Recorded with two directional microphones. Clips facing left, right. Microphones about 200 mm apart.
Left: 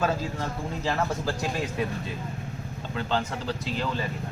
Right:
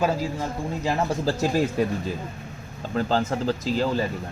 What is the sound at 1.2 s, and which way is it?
Speech, 35° right (ahead or behind).